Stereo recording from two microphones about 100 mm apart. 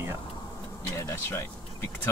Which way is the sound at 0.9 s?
25° left (ahead or behind).